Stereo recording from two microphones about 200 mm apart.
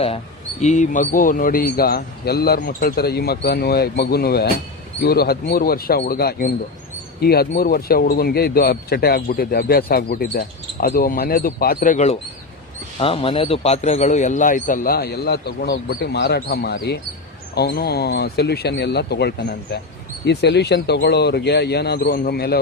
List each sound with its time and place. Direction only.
0.6 s a man's voice: 35° left (ahead or behind); by 22.6 s 50° left (ahead or behind)